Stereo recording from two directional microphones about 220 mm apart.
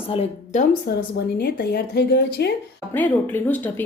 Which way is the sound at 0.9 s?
45° left (ahead or behind).